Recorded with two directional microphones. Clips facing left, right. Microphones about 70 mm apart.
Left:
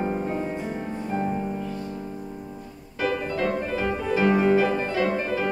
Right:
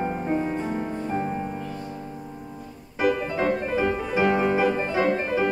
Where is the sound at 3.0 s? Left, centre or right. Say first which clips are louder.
Right 2 dB; centre.